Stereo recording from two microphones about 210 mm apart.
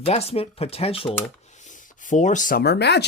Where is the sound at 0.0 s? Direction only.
30° left (ahead or behind).